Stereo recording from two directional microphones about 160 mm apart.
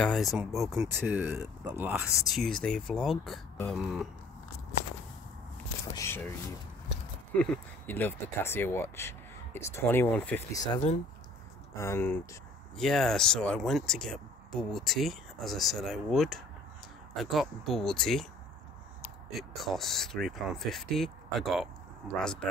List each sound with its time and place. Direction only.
0.0 s speech: centre (ahead or behind)
1.0 s speech: 15° right (ahead or behind)
2.3 s speech: 5° left (ahead or behind)
5.9 s a sound: 15° left (ahead or behind)
7.3 s speech: 10° left (ahead or behind)
10.5 s speech: 25° left (ahead or behind)
12.7 s speech: centre (ahead or behind)
19.3 s speech: centre (ahead or behind)